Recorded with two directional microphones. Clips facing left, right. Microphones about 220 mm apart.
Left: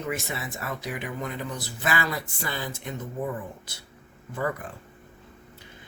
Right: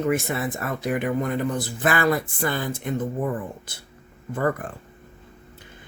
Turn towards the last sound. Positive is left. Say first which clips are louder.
# right 6 dB
turn(degrees=-50)  # may be behind; listen again after turning